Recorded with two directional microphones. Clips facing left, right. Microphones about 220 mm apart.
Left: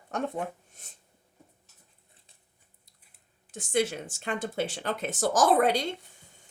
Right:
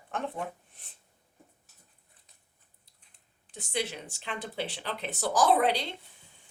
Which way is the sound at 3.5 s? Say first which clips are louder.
Left 7 dB; 45° left (ahead or behind).